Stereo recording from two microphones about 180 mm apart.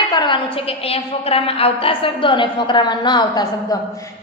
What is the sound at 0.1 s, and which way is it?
A woman's voice, 25° left (ahead or behind).